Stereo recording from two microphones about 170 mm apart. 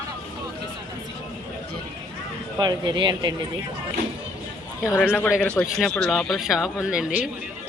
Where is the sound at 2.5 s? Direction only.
25° right (ahead or behind).